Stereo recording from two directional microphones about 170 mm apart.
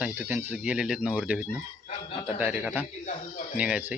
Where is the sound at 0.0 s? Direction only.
10° right (ahead or behind).